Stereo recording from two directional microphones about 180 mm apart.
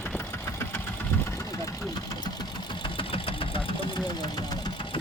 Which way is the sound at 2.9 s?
30° left (ahead or behind).